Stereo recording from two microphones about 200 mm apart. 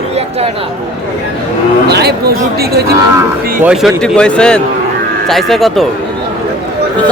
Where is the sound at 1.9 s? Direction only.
55° right (ahead or behind).